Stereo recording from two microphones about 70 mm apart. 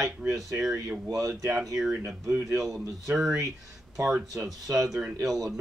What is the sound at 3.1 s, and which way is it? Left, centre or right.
Speech, centre.